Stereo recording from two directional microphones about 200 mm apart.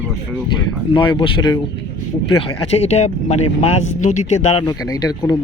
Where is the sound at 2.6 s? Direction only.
30° left (ahead or behind).